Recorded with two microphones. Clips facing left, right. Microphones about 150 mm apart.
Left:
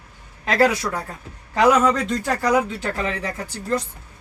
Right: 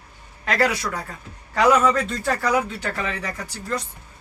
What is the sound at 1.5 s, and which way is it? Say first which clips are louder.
Speech: left 1 dB; 15° left (ahead or behind).